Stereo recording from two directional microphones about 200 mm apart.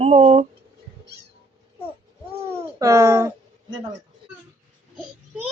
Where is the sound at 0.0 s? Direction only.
30° right (ahead or behind).